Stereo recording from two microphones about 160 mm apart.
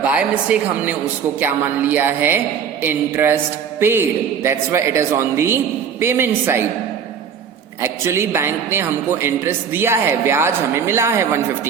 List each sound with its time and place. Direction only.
0.0 s a woman's voice: 10° right (ahead or behind)
7.8 s a woman's voice: 15° right (ahead or behind)